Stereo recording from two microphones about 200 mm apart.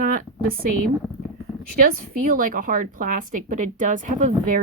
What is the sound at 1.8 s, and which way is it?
A woman's voice, 45° right (ahead or behind).